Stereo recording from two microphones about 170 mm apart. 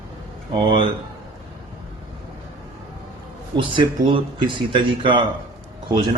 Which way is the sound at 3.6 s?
30° right (ahead or behind).